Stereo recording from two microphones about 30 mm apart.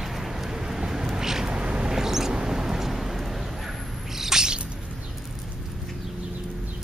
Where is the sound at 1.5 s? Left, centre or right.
Right.